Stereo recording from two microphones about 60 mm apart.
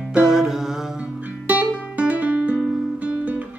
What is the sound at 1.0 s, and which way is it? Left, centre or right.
Music, right.